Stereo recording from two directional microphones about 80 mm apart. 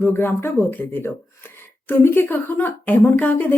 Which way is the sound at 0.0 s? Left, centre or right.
Left.